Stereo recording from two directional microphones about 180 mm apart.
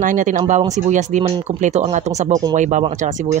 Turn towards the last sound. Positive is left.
turn(degrees=-45)  # may be behind; listen again after turning